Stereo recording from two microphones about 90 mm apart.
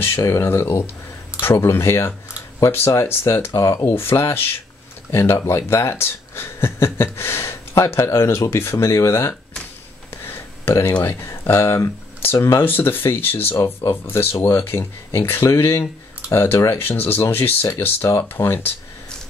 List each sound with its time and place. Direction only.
0.0 s speech: 30° left (ahead or behind)
10.1 s a sound: 25° left (ahead or behind)
11.1 s speech: 30° left (ahead or behind)